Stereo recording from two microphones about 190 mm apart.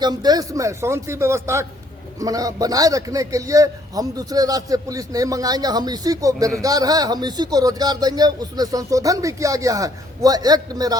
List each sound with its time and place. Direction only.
0.0 s a man's voice: 20° right (ahead or behind)